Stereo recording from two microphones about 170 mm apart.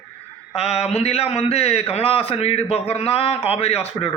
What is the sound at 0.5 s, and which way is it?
A man's voice, 35° left (ahead or behind).